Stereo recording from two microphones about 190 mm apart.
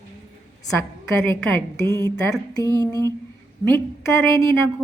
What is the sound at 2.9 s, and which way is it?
Mantra, 15° left (ahead or behind).